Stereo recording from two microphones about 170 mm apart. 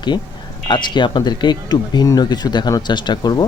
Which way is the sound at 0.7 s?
25° left (ahead or behind).